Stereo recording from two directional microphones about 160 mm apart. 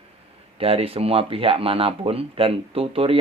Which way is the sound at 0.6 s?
35° right (ahead or behind).